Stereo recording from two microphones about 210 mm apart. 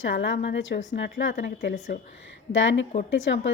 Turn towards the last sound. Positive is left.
turn(degrees=60)  # may be behind; listen again after turning